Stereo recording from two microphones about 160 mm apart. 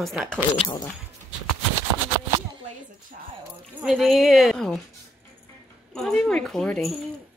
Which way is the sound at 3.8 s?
Centre (ahead or behind).